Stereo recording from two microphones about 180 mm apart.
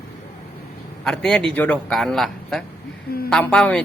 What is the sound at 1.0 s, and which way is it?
A woman's voice, 5° left (ahead or behind).